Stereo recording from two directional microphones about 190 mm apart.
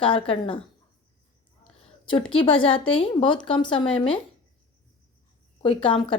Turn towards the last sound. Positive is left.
turn(degrees=25)  # may be behind; listen again after turning